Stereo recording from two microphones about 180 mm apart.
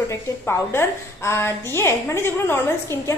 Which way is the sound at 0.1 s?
15° left (ahead or behind).